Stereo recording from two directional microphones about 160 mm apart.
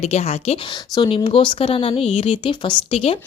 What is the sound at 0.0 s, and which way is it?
Speech, 45° left (ahead or behind).